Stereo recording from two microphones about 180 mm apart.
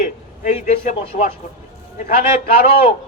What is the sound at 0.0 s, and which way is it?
A man's voice, 45° left (ahead or behind).